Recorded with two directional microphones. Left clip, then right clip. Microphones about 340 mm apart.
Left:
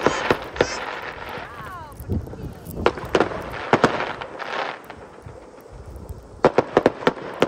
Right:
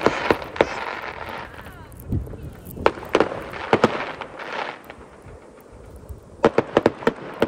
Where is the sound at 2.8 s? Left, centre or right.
Centre.